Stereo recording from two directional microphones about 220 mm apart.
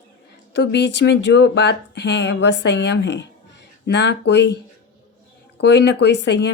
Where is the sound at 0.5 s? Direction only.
50° left (ahead or behind).